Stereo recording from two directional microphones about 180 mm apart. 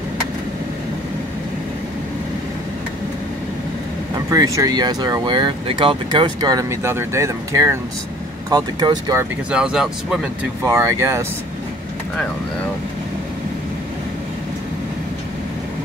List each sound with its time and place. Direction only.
4.3 s speech: 20° right (ahead or behind)
9.5 s speech: 5° right (ahead or behind)
10.6 s speech: 15° right (ahead or behind)